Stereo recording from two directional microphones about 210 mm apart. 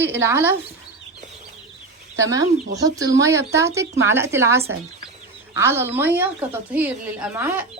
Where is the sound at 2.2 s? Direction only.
15° right (ahead or behind).